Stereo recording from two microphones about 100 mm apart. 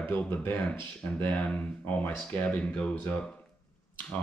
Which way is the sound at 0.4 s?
20° left (ahead or behind).